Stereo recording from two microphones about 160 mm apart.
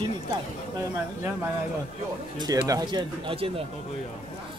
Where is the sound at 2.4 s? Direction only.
25° right (ahead or behind).